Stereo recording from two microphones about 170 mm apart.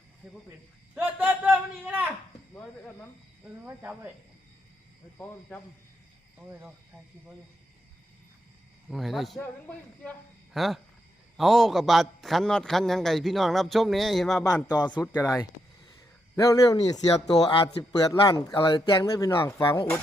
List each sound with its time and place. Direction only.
0.9 s a sound: 10° right (ahead or behind)
2.6 s a sound: 10° left (ahead or behind)
3.7 s speech: 10° right (ahead or behind)
5.1 s speech: 10° left (ahead or behind)
6.5 s speech: 15° right (ahead or behind)
8.9 s a man's voice: centre (ahead or behind)
14.7 s speech: 25° left (ahead or behind)
17.2 s speech: 30° left (ahead or behind)
18.1 s speech: 20° left (ahead or behind)